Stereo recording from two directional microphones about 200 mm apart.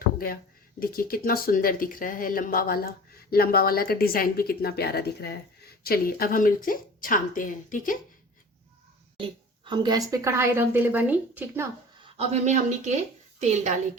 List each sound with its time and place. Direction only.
0.8 s speech: 45° left (ahead or behind)
9.6 s a woman's voice: 20° right (ahead or behind)
12.1 s speech: 35° right (ahead or behind)